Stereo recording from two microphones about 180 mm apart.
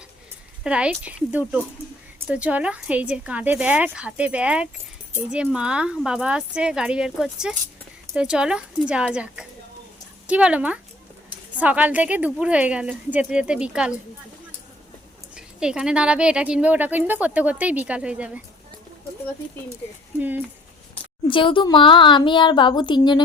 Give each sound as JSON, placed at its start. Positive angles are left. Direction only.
{"t": 0.6, "sound": "speech", "side_deg": -5}
{"t": 15.4, "sound": "speech", "side_deg": -5}
{"t": 20.1, "sound": "speech", "side_deg": -10}
{"t": 21.2, "sound": "speech", "side_deg": 30}